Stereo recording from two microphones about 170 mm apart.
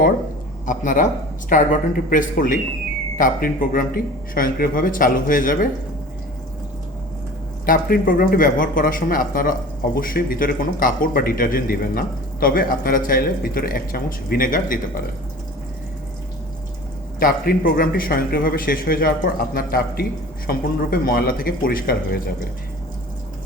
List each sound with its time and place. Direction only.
0.6 s a man's voice: 50° left (ahead or behind)
7.6 s speech: 55° left (ahead or behind)
17.2 s speech: 60° left (ahead or behind)